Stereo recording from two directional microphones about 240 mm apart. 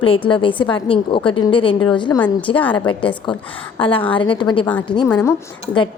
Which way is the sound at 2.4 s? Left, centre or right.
Left.